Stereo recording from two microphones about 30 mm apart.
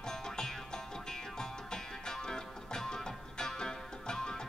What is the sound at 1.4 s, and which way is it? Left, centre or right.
Music, centre.